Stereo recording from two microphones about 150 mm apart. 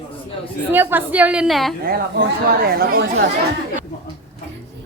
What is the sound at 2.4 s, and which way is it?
Speech, 90° right.